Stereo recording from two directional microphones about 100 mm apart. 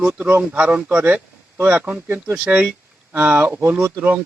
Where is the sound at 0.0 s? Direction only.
15° right (ahead or behind).